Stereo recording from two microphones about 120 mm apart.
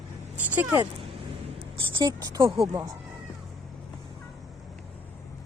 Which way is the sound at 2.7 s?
30° right (ahead or behind).